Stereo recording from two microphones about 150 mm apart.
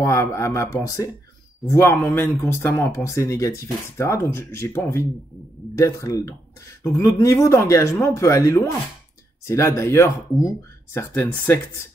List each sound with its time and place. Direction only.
0.0 s speech: 20° left (ahead or behind)